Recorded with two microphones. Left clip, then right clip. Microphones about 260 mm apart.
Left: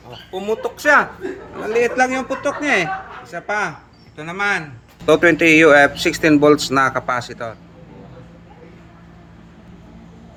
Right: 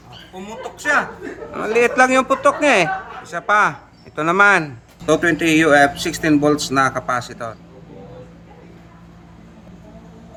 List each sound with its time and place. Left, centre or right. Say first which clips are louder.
0.4 s speech: left 5 dB; centre
1.5 s speech: right 2 dB; centre
5.0 s speech: left 4 dB; centre